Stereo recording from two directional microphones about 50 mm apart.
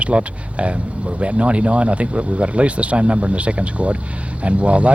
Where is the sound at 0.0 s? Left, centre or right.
Right.